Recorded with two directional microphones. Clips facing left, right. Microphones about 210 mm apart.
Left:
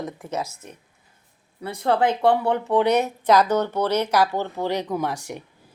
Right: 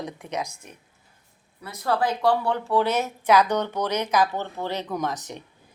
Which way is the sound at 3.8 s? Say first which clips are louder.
Left 4 dB; 10° right (ahead or behind).